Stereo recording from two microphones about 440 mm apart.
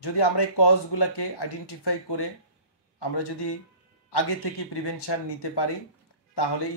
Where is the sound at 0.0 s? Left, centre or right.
Left.